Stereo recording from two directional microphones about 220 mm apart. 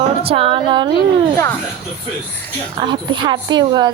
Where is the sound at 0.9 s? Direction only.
15° left (ahead or behind).